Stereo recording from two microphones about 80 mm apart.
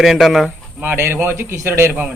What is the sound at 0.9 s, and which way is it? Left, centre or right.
A man's voice, right.